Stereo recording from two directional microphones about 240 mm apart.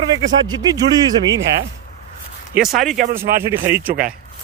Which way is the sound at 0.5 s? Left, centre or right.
Centre.